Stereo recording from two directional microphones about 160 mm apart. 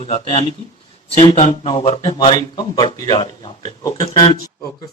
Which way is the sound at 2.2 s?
30° left (ahead or behind).